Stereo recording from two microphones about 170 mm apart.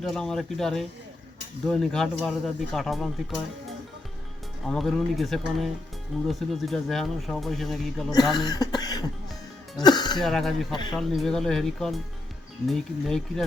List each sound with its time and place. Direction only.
0.0 s speech: 5° left (ahead or behind)
4.6 s speech: centre (ahead or behind)
8.1 s cough: 25° left (ahead or behind)
9.7 s music: 25° left (ahead or behind)
10.2 s speech: centre (ahead or behind)